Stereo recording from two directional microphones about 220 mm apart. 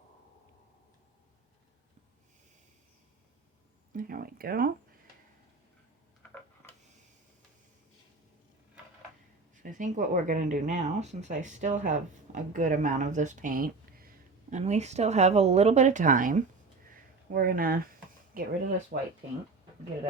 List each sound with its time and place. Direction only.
3.9 s speech: 40° right (ahead or behind)
9.6 s speech: 35° right (ahead or behind)
14.5 s speech: 30° right (ahead or behind)
16.9 s a sound: 40° right (ahead or behind)
18.3 s speech: 40° right (ahead or behind)